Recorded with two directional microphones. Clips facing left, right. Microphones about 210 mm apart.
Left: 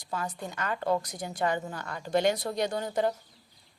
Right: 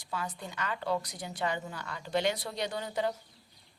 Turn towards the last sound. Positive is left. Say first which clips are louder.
# left 4 dB
turn(degrees=45)  # may be behind; listen again after turning